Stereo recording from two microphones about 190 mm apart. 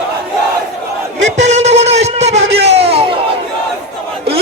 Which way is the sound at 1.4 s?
35° right (ahead or behind).